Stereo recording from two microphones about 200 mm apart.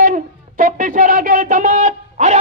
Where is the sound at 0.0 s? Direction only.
45° right (ahead or behind).